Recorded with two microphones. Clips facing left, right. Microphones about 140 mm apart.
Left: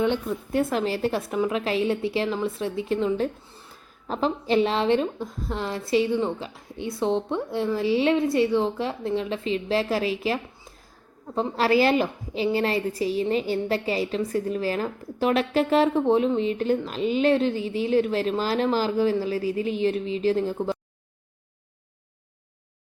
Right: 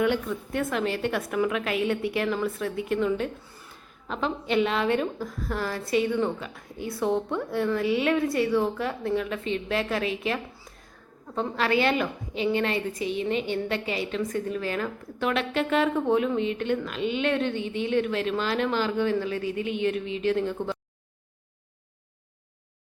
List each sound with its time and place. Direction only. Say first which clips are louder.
0.0 s a woman's voice: left 1 dB; 30° left (ahead or behind)
11.5 s a woman's voice: left 4 dB; 35° left (ahead or behind)